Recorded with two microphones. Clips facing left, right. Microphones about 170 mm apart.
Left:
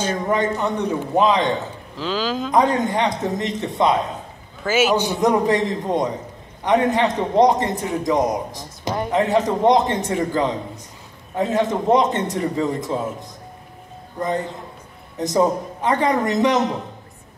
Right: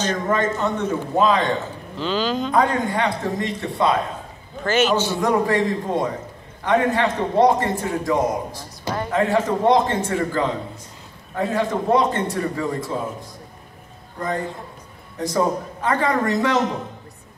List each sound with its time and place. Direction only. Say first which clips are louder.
0.0 s a man's voice: left 1 dB; 10° left (ahead or behind)
2.0 s speech: right 1 dB; centre (ahead or behind)
2.5 s a man's voice: left 3 dB; 20° left (ahead or behind)
4.6 s a man's voice: left 1 dB; 5° left (ahead or behind)
15.1 s a man's voice: left 3 dB; 20° left (ahead or behind)